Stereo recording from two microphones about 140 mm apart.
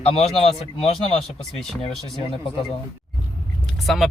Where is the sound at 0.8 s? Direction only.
45° left (ahead or behind).